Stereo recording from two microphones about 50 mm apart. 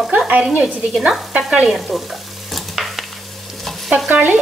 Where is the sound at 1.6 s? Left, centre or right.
Centre.